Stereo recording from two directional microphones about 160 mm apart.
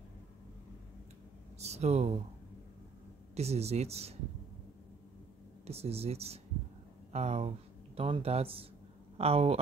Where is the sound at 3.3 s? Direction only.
40° right (ahead or behind).